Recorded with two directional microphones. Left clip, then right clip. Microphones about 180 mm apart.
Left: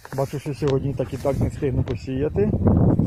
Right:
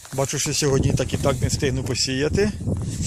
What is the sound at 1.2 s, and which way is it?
Speech, 5° right (ahead or behind).